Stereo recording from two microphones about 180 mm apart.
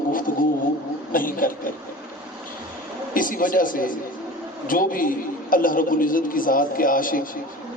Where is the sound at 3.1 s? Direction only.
50° left (ahead or behind).